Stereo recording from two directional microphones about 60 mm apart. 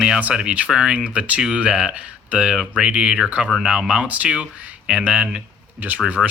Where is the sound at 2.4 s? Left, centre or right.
Centre.